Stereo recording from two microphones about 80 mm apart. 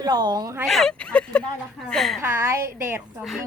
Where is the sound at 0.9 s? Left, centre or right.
Centre.